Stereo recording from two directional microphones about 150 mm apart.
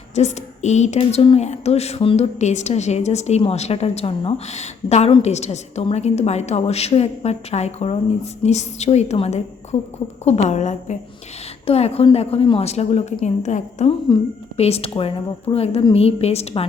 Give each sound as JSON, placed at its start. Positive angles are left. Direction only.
{"t": 0.1, "sound": "a woman's voice", "side_deg": 45}